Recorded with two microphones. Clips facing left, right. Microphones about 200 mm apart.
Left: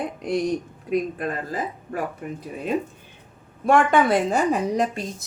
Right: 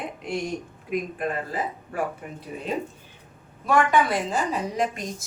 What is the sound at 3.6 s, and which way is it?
Speech, 55° left (ahead or behind).